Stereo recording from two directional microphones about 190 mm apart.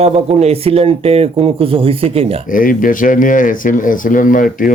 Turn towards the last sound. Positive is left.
turn(degrees=45)  # may be behind; listen again after turning